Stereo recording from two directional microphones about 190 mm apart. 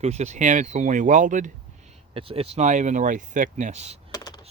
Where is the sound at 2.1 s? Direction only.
30° right (ahead or behind).